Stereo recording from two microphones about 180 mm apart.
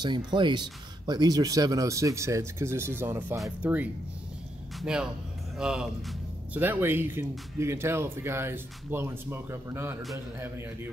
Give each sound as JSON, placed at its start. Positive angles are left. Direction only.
{"t": 0.0, "sound": "a man's voice", "side_deg": -25}